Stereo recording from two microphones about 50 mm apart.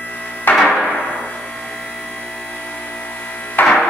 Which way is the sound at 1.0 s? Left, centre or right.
Left.